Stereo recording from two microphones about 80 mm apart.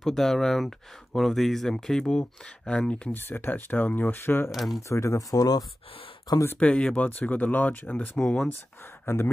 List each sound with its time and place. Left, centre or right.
0.0 s speech: centre
3.2 s speech: left
4.5 s speech: centre
4.8 s speech: left
6.3 s speech: left
6.6 s speech: centre
7.1 s speech: left
8.2 s speech: centre
9.0 s speech: left